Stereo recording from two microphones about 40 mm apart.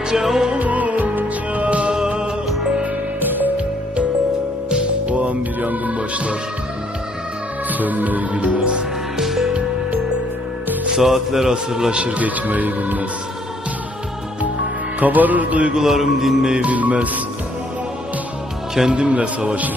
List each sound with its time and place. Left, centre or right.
0.1 s a man's voice: centre
0.6 s music: right
3.2 s music: right
4.7 s music: right
7.7 s music: right
9.1 s music: centre
10.9 s a man's voice: centre; by 12.2 s right
12.2 s music: right
14.9 s music: right
15.7 s a man's voice: centre
16.6 s music: right
18.9 s a man's voice: right